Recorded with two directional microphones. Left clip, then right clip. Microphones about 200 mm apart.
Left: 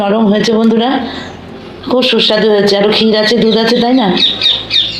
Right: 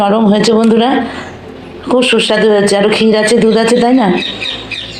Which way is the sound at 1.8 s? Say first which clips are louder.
Even; 25° right (ahead or behind).